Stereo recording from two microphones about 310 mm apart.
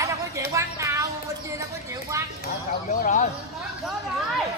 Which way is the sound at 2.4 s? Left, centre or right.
Left.